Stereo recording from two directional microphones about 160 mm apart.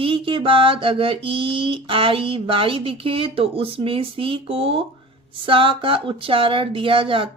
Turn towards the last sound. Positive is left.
turn(degrees=-35)  # may be behind; listen again after turning